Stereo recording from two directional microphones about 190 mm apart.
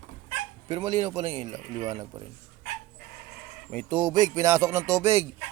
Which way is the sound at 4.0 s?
20° right (ahead or behind).